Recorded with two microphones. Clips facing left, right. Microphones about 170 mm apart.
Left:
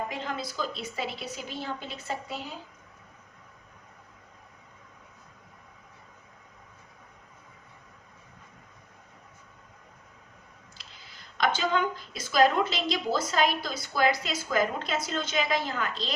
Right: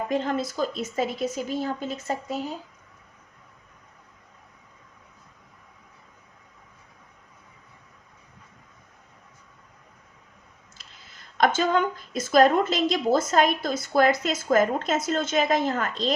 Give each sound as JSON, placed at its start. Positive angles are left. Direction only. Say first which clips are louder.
{"t": 0.1, "sound": "a woman's voice", "louder": "right 9 dB", "side_deg": -45}
{"t": 10.8, "sound": "a sound", "louder": "right 1 dB", "side_deg": -45}
{"t": 11.3, "sound": "a woman's voice", "louder": "right 5 dB", "side_deg": -45}